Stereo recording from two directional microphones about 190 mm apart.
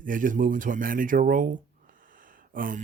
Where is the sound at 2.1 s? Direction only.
45° right (ahead or behind).